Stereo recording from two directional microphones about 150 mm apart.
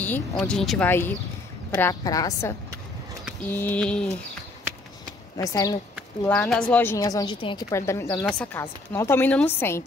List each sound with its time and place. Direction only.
0.0 s a woman's voice: 10° left (ahead or behind); by 2.5 s 25° left (ahead or behind)
3.5 s a woman's voice: 10° left (ahead or behind)
5.4 s a woman's voice: 25° left (ahead or behind)
6.2 s a woman's voice: 10° left (ahead or behind)
7.0 s a woman's voice: 25° left (ahead or behind)
7.3 s a woman's voice: 35° left (ahead or behind)
7.7 s a woman's voice: 20° left (ahead or behind)